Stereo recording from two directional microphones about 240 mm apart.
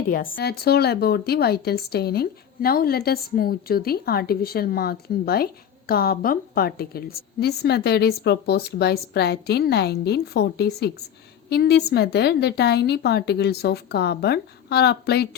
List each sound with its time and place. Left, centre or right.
0.1 s a woman's voice: left